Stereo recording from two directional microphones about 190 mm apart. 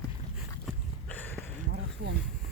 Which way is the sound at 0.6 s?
10° left (ahead or behind).